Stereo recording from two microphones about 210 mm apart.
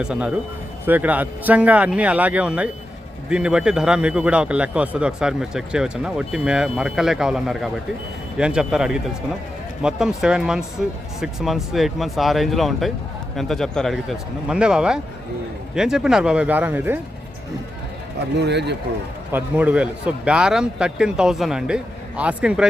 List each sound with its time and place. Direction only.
0.0 s a man's voice: 5° right (ahead or behind)
18.3 s speech: 55° right (ahead or behind)
19.3 s a man's voice: 5° right (ahead or behind)